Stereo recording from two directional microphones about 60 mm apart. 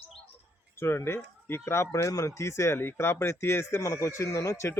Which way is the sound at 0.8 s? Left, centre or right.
Left.